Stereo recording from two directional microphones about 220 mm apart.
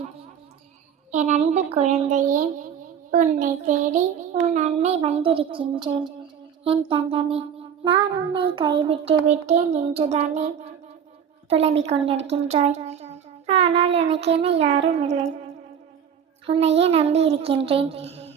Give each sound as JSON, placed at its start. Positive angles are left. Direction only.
{"t": 1.1, "sound": "a woman's voice", "side_deg": -30}
{"t": 3.1, "sound": "child singing", "side_deg": -35}
{"t": 11.4, "sound": "a woman's voice", "side_deg": -30}
{"t": 11.8, "sound": "child singing", "side_deg": -25}
{"t": 12.3, "sound": "a child's voice", "side_deg": -30}
{"t": 16.5, "sound": "child singing", "side_deg": -25}